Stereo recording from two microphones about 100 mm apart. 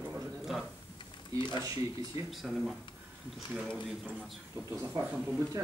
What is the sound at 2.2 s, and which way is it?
Speech, centre (ahead or behind).